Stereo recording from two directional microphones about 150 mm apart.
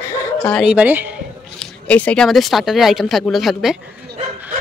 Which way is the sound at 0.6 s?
10° right (ahead or behind).